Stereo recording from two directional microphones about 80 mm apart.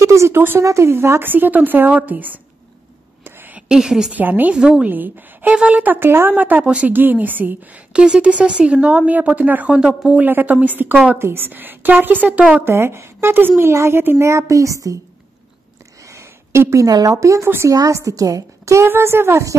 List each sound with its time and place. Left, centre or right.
0.0 s a woman's voice: right
3.3 s a sound: right
3.6 s a woman's voice: centre
4.1 s a woman's voice: right
12.6 s a woman's voice: right
16.0 s a woman's voice: right
18.9 s a woman's voice: right